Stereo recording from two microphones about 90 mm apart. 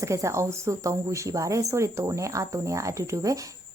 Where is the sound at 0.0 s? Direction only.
35° right (ahead or behind).